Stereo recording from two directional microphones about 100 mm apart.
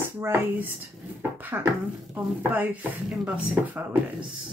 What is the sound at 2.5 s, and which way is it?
Speech, 15° right (ahead or behind).